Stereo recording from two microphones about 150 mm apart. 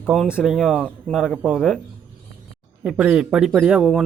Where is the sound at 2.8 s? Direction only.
5° right (ahead or behind).